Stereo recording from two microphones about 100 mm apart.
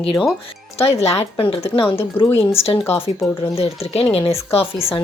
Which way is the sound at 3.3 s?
65° left (ahead or behind).